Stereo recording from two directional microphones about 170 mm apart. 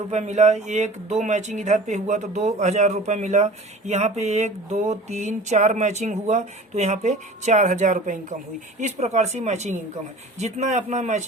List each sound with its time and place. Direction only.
0.1 s speech: 40° right (ahead or behind)